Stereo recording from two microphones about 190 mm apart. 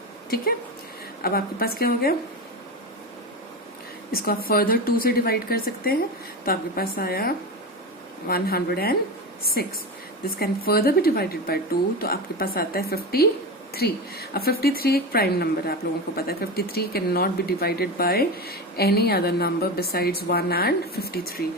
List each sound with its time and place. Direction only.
1.2 s speech: 50° left (ahead or behind)
4.1 s a woman's voice: 50° left (ahead or behind)